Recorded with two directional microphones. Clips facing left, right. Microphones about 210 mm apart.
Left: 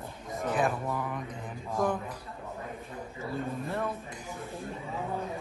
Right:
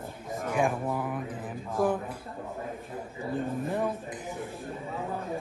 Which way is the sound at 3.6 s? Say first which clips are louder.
Right 4 dB; 15° right (ahead or behind).